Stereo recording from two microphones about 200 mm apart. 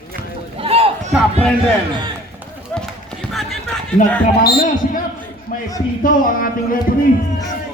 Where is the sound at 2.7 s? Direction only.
5° left (ahead or behind).